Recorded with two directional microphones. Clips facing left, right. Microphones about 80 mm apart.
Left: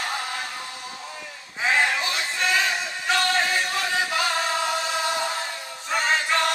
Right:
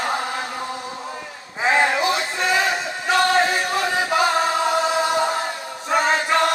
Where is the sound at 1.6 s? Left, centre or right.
Right.